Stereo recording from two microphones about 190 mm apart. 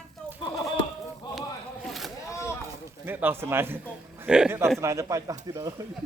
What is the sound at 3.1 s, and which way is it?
Speech, 10° right (ahead or behind).